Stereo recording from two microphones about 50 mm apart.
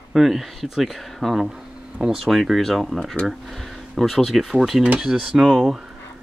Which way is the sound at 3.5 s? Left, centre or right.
Centre.